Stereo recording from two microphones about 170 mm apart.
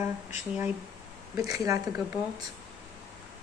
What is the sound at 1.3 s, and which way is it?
Speech, 20° right (ahead or behind).